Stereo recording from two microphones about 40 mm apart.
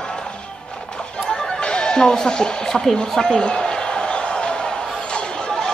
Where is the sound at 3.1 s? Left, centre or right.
Centre.